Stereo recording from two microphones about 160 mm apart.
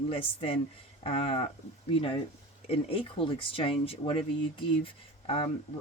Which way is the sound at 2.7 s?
35° left (ahead or behind).